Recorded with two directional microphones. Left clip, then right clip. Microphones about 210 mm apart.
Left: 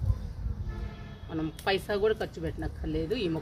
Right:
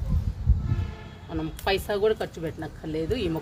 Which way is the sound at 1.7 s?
15° right (ahead or behind).